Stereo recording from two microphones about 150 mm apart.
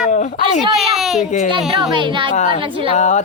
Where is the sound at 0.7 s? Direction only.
Centre (ahead or behind).